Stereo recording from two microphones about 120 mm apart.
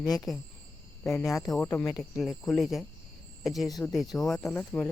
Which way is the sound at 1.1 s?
25° left (ahead or behind).